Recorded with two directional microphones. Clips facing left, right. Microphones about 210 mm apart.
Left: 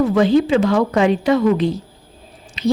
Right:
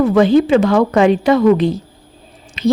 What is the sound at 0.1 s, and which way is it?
Speech, 55° right (ahead or behind).